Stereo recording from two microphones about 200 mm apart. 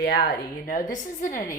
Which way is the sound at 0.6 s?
40° left (ahead or behind).